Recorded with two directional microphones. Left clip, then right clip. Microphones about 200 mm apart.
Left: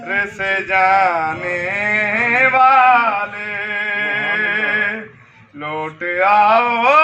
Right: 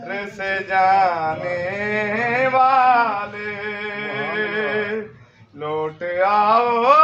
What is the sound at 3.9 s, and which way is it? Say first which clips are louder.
Music: left 7 dB; 65° right (ahead or behind).